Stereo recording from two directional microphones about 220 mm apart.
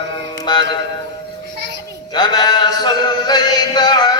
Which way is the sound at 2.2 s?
20° left (ahead or behind).